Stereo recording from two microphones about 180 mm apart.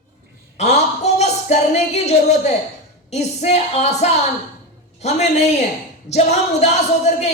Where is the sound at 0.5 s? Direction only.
40° left (ahead or behind).